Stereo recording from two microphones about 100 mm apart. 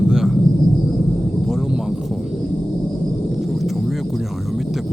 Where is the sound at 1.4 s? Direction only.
5° right (ahead or behind).